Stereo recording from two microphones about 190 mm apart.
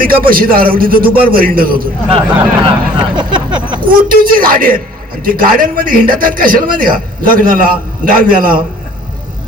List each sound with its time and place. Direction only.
0.0 s a man's voice: 50° right (ahead or behind)
2.6 s a sound: 25° right (ahead or behind)
3.8 s a man's voice: 50° right (ahead or behind)